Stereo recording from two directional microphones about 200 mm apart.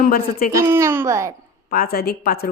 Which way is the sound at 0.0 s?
45° left (ahead or behind).